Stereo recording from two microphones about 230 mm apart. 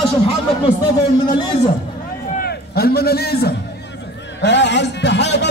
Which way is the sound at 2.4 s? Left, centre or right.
Left.